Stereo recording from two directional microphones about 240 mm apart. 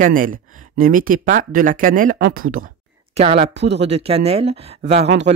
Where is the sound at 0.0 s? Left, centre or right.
Right.